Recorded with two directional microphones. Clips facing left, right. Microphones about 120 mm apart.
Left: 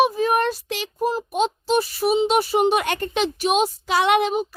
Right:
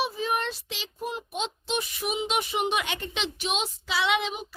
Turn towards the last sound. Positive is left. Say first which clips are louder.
# left 8 dB
turn(degrees=50)  # may be behind; listen again after turning